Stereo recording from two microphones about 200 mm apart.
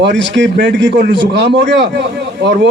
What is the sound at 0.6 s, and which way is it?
A man's voice, 65° right (ahead or behind).